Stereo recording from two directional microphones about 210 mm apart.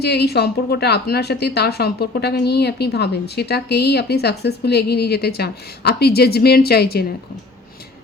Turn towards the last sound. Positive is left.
turn(degrees=50)  # may be behind; listen again after turning